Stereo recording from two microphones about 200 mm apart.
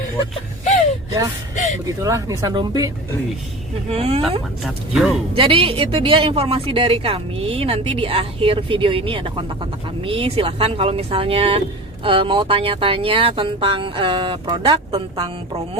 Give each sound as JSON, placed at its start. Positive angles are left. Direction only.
{"t": 1.5, "sound": "speech", "side_deg": 35}
{"t": 2.0, "sound": "speech", "side_deg": -15}
{"t": 4.6, "sound": "speech", "side_deg": 0}
{"t": 5.3, "sound": "speech", "side_deg": -25}